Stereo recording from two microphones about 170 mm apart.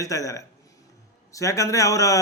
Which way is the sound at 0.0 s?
20° left (ahead or behind).